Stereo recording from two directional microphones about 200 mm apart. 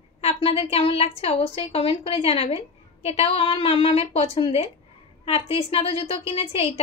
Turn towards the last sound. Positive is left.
turn(degrees=30)  # may be behind; listen again after turning